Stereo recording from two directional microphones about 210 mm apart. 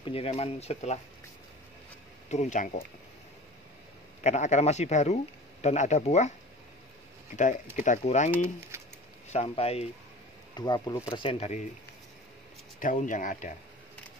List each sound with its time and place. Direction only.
0.0 s speech: 25° left (ahead or behind)
2.2 s speech: 35° left (ahead or behind)
4.2 s speech: 35° left (ahead or behind)
7.7 s speech: 35° left (ahead or behind)
9.3 s speech: 30° left (ahead or behind)
12.8 s speech: 40° left (ahead or behind)